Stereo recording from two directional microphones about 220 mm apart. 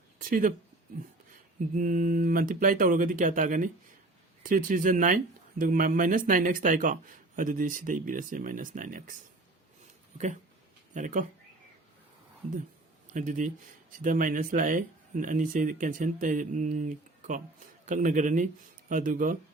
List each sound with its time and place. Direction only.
0.2 s speech: 40° right (ahead or behind)
1.7 s speech: 35° right (ahead or behind)
10.9 s speech: 35° right (ahead or behind)
13.1 s speech: 35° right (ahead or behind)